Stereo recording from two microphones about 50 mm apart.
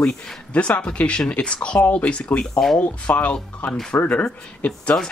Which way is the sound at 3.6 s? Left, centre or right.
Left.